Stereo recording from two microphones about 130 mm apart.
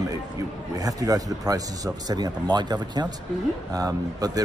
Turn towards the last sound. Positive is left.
turn(degrees=-30)  # may be behind; listen again after turning